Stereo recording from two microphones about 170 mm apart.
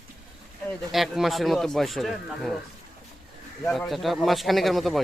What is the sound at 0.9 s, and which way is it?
Speech, centre (ahead or behind).